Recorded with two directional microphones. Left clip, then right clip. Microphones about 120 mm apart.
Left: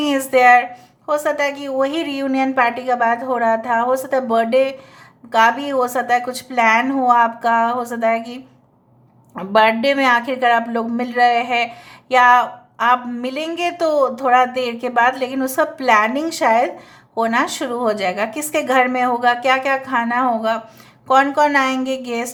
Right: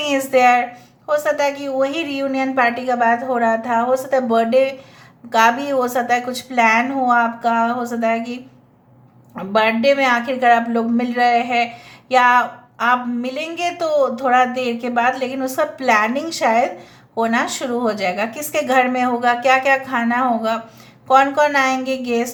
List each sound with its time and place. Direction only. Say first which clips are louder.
0.0 s a woman's voice: left 1 dB; 35° left (ahead or behind)